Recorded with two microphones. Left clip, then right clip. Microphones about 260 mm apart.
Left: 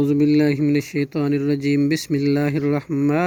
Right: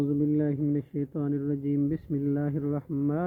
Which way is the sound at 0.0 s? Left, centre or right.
Left.